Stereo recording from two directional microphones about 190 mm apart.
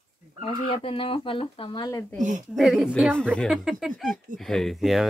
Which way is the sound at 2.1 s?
40° right (ahead or behind).